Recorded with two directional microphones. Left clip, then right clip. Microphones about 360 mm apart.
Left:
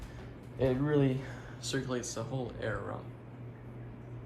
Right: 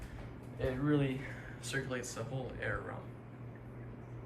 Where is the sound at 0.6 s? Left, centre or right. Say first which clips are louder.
Left 5 dB; centre.